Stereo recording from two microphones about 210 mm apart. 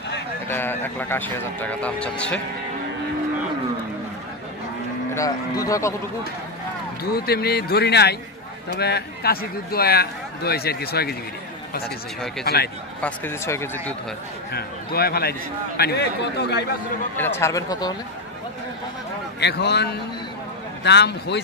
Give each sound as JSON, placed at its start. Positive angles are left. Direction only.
{"t": 0.5, "sound": "speech", "side_deg": 10}
{"t": 5.1, "sound": "speech", "side_deg": 15}
{"t": 7.2, "sound": "speech", "side_deg": 50}
{"t": 13.0, "sound": "speech", "side_deg": 10}
{"t": 14.5, "sound": "speech", "side_deg": 45}
{"t": 17.2, "sound": "speech", "side_deg": 15}
{"t": 19.4, "sound": "speech", "side_deg": 50}